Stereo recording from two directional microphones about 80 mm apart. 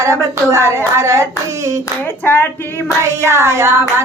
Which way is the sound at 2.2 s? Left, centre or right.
Left.